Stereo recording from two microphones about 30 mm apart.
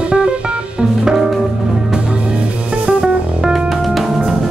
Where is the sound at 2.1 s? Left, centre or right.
Right.